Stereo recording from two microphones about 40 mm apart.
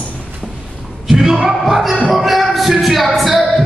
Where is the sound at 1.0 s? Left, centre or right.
Centre.